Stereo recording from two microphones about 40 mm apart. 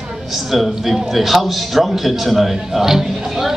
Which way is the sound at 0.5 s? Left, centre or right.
Centre.